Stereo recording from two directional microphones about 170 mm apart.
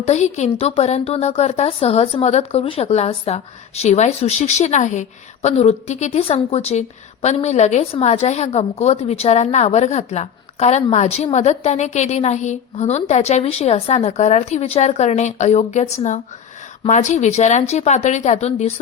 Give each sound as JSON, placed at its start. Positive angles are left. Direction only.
{"t": 0.0, "sound": "a woman's voice", "side_deg": 40}